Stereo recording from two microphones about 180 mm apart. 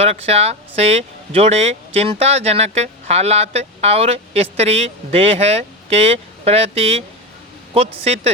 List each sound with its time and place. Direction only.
0.0 s speech: 35° right (ahead or behind)